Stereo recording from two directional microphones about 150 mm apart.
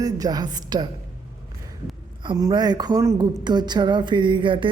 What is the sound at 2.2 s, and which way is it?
A woman's voice, 30° right (ahead or behind).